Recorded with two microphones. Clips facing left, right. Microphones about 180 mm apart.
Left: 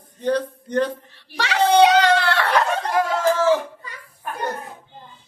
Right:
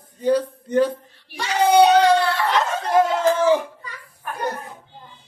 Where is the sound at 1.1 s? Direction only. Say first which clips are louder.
Left 2 dB; 80° left.